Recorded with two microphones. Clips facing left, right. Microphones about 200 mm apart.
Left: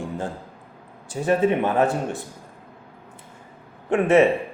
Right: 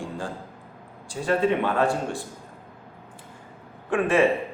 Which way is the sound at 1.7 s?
20° left (ahead or behind).